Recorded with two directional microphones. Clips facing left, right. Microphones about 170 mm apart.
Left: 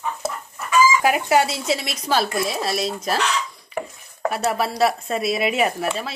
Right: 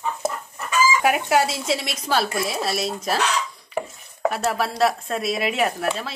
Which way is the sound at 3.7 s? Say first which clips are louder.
Right 1 dB; 5° right (ahead or behind).